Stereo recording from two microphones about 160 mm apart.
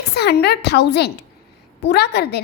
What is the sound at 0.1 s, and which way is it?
A woman's voice, 90° left.